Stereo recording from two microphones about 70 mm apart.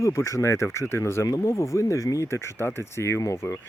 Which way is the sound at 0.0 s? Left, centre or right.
Left.